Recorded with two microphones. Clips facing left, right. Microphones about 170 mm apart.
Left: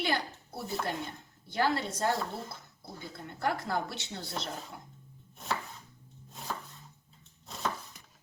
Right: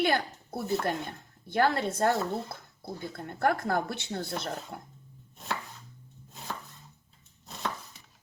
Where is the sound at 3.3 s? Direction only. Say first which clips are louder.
Right 5 dB; 50° right (ahead or behind).